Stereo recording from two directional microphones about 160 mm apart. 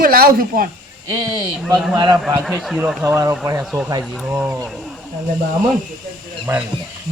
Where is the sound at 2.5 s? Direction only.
5° right (ahead or behind).